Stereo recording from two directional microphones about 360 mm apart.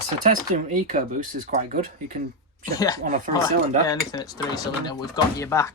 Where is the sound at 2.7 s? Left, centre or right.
Centre.